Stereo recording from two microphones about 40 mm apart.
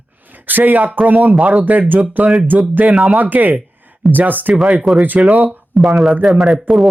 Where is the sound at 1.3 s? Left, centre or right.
Right.